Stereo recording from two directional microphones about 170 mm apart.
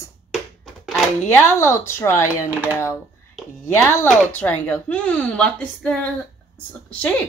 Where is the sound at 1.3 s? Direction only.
15° left (ahead or behind).